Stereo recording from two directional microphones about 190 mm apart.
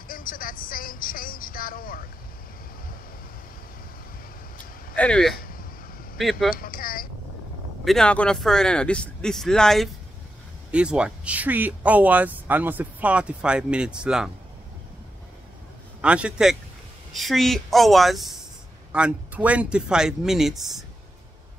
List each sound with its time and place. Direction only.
0.1 s speech: 45° left (ahead or behind)
4.9 s speech: 5° left (ahead or behind)
6.5 s speech: 50° left (ahead or behind)
7.8 s speech: 5° left (ahead or behind)
16.0 s speech: 5° right (ahead or behind)